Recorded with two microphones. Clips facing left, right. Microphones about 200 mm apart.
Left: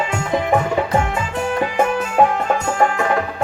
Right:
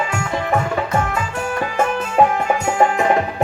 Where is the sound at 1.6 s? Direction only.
15° left (ahead or behind).